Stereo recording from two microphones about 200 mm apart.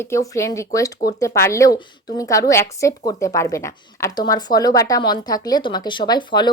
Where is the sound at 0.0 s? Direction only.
15° left (ahead or behind).